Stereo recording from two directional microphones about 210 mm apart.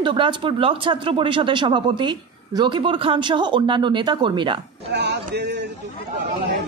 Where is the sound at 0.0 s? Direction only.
25° right (ahead or behind).